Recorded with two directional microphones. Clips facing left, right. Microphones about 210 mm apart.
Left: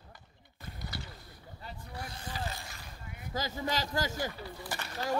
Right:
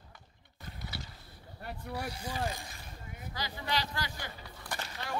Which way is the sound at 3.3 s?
45° left (ahead or behind).